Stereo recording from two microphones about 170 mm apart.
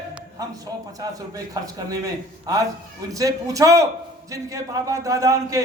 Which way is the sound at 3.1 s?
20° right (ahead or behind).